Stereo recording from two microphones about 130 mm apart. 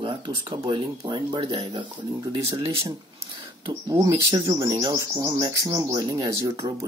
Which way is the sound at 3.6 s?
35° right (ahead or behind).